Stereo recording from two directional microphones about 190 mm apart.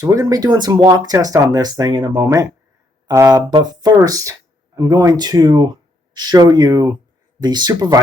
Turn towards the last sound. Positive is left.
turn(degrees=-20)  # may be behind; listen again after turning